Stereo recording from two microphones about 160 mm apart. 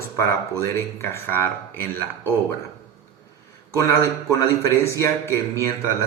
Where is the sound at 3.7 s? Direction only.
20° left (ahead or behind).